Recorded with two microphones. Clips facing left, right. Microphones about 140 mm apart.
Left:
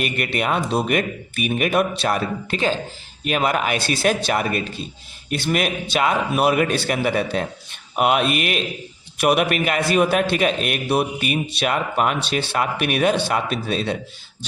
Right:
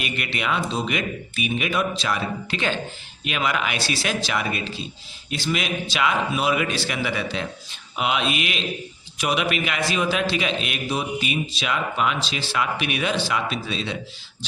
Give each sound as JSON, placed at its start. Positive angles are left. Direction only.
{"t": 0.0, "sound": "a man's voice", "side_deg": 45}